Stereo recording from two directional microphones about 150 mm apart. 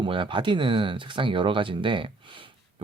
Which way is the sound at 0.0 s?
35° right (ahead or behind).